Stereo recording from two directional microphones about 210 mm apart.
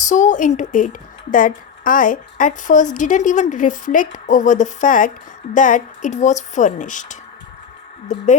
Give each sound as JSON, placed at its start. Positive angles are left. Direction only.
{"t": 0.0, "sound": "a woman's voice", "side_deg": 35}